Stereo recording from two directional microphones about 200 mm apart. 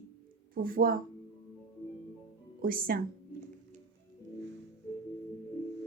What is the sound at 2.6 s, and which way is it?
Speech, 45° right (ahead or behind).